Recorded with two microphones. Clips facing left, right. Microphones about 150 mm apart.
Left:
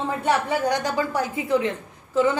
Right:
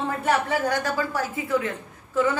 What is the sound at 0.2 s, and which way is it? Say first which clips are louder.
A woman's voice: left 1 dB; 15° left (ahead or behind).